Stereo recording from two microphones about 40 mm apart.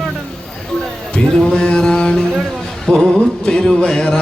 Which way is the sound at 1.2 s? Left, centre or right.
Centre.